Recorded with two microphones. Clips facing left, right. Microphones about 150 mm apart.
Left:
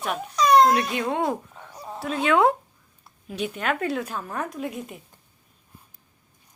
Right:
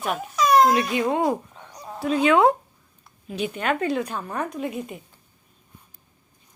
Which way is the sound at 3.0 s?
Centre (ahead or behind).